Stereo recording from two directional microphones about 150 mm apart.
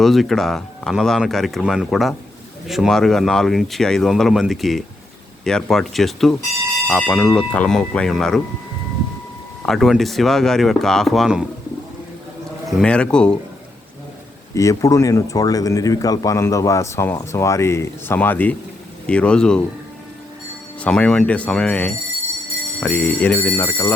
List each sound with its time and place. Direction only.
0.0 s speech: centre (ahead or behind)
9.6 s speech: centre (ahead or behind)
12.6 s speech: 5° left (ahead or behind)
14.5 s speech: 20° left (ahead or behind); by 19.6 s 5° left (ahead or behind)
20.8 s speech: 5° left (ahead or behind)